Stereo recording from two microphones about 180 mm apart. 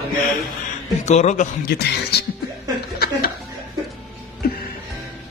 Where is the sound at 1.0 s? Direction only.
40° left (ahead or behind).